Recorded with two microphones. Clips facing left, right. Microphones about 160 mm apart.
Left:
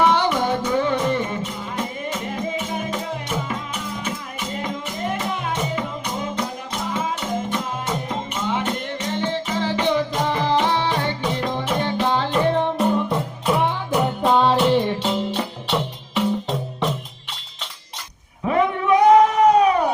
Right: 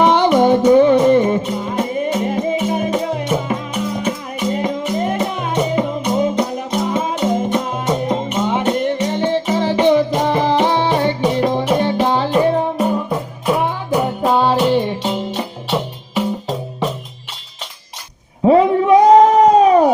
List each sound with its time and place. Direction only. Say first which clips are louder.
0.0 s music: right 7 dB; 20° right (ahead or behind)
18.4 s cat: right 8 dB; 30° right (ahead or behind)